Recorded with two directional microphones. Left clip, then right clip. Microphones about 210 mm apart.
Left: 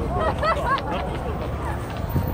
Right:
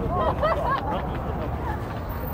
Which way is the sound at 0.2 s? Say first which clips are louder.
Left 1 dB; 30° left (ahead or behind).